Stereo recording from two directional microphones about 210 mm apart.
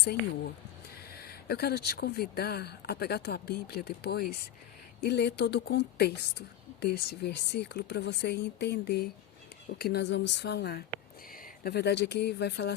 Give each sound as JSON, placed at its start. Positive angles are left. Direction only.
{"t": 1.1, "sound": "a woman's voice", "side_deg": 45}